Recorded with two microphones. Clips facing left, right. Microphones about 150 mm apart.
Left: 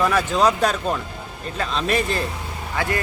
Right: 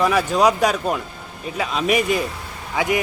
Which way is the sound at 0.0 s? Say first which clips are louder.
Right 2 dB; 10° right (ahead or behind).